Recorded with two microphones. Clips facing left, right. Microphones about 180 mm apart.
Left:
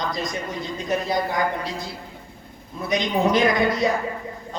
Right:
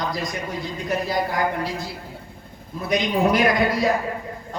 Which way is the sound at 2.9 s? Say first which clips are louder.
Right 1 dB; 20° left (ahead or behind).